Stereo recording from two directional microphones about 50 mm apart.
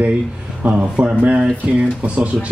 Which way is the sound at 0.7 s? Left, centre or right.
Right.